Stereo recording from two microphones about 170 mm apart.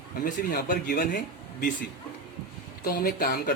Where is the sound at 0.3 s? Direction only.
60° left (ahead or behind).